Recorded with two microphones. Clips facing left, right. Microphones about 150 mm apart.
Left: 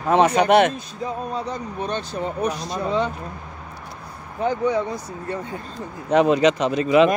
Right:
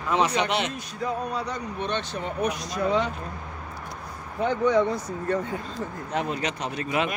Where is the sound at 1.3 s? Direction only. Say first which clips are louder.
Left 3 dB; 40° left (ahead or behind).